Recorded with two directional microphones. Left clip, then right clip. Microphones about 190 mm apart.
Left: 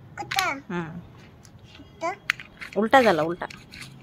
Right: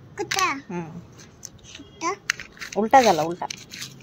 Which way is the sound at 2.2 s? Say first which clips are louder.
Even; 25° right (ahead or behind).